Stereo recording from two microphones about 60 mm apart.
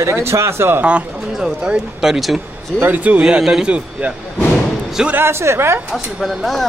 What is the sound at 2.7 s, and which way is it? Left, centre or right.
Speech, right.